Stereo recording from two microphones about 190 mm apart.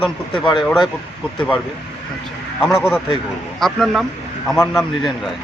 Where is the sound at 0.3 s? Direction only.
25° left (ahead or behind).